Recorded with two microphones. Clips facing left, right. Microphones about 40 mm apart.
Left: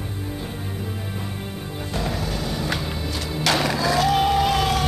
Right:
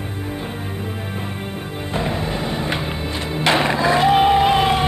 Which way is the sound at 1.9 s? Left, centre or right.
Right.